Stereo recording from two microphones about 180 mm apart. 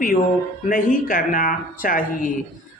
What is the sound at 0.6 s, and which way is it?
Speech, 50° left (ahead or behind).